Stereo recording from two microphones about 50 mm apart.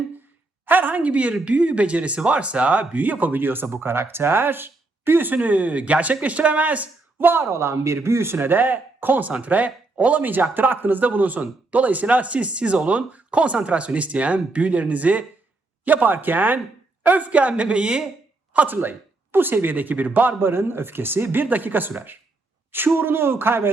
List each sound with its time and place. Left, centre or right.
0.6 s speech: right
7.2 s speech: right
7.4 s speech: right; by 18.0 s centre
18.5 s speech: right
20.5 s speech: right